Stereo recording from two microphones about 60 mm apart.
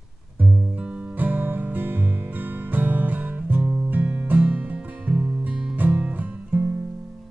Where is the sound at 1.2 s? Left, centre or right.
Right.